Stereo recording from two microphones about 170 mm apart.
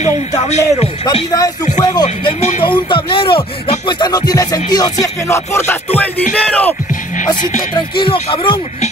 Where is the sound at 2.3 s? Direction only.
40° left (ahead or behind).